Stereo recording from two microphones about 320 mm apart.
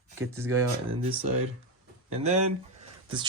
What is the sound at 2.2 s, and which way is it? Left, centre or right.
Speech, centre.